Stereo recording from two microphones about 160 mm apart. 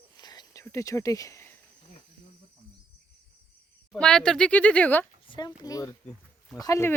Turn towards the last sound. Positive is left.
turn(degrees=15)  # may be behind; listen again after turning